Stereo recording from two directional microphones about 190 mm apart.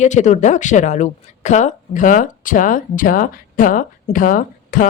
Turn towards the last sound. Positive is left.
turn(degrees=45)  # may be behind; listen again after turning